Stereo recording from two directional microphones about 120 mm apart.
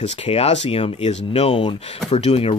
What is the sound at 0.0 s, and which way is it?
Speech, 55° left (ahead or behind).